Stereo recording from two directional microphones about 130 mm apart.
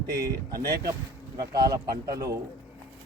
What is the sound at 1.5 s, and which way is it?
Speech, 30° right (ahead or behind).